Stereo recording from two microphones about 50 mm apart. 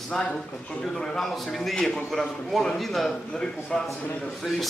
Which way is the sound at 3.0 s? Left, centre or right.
Centre.